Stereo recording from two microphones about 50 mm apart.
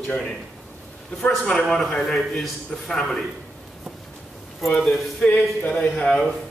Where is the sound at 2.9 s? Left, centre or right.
Centre.